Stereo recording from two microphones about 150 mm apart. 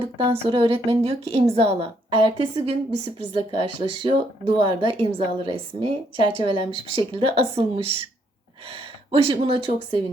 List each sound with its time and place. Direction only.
0.0 s speech: 40° right (ahead or behind)